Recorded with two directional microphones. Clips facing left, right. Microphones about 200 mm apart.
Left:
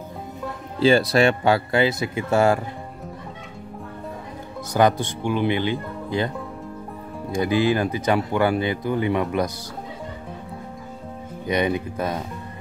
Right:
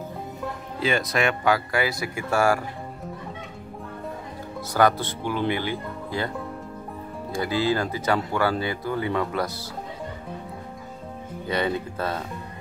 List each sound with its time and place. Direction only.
0.7 s speech: 30° left (ahead or behind)
4.7 s speech: 15° left (ahead or behind)
7.3 s speech: 15° left (ahead or behind)
11.4 s speech: 15° left (ahead or behind)